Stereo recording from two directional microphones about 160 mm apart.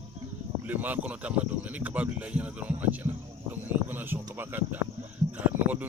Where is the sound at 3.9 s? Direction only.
10° right (ahead or behind).